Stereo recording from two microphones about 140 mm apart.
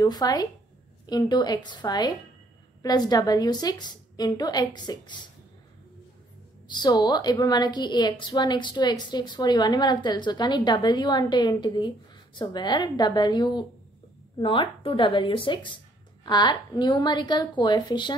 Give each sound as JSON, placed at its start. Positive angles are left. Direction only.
{"t": 0.0, "sound": "a woman's voice", "side_deg": 30}
{"t": 6.7, "sound": "a woman's voice", "side_deg": 30}